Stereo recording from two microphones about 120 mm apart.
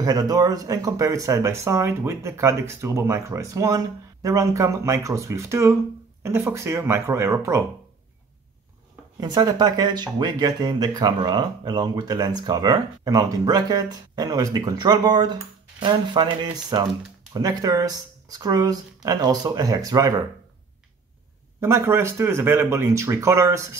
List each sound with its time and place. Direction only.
0.0 s speech: 30° right (ahead or behind)
9.2 s speech: 35° right (ahead or behind)
21.5 s speech: 20° right (ahead or behind)